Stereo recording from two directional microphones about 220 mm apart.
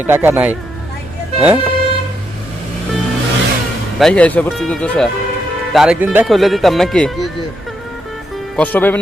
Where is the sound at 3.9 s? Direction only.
5° left (ahead or behind).